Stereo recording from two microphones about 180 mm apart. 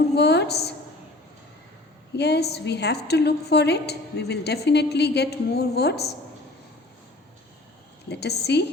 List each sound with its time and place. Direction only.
0.2 s a woman's voice: 70° left (ahead or behind)
2.1 s a woman's voice: 70° left (ahead or behind)
8.1 s a woman's voice: 65° left (ahead or behind)